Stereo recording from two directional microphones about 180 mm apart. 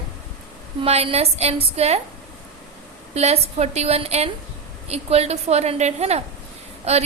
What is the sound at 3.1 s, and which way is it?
A woman's voice, 35° right (ahead or behind).